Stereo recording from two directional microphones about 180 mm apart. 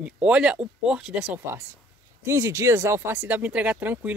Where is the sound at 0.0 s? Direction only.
5° right (ahead or behind).